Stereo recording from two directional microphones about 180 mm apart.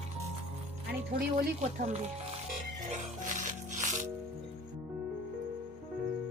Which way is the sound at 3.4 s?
45° right (ahead or behind).